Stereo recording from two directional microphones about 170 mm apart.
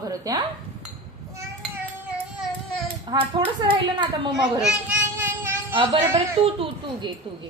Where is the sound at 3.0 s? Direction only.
25° right (ahead or behind).